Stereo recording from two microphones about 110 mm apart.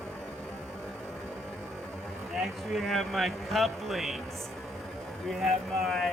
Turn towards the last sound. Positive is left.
turn(degrees=0)  # may be behind; listen again after turning